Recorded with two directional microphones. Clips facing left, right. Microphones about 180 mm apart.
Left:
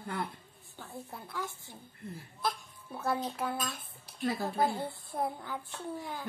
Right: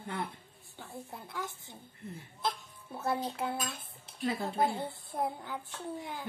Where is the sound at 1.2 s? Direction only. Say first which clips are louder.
Left 2 dB; 20° right (ahead or behind).